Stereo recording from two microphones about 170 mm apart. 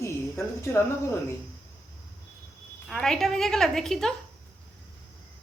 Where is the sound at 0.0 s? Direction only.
15° left (ahead or behind).